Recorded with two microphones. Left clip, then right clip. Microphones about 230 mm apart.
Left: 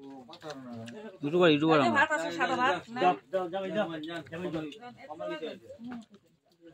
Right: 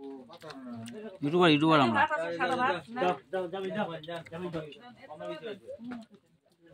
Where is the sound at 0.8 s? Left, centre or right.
Right.